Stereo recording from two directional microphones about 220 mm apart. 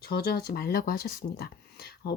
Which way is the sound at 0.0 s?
45° left (ahead or behind).